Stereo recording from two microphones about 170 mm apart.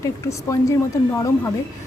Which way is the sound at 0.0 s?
20° left (ahead or behind).